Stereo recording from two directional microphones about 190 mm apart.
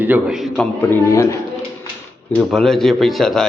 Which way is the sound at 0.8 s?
15° left (ahead or behind).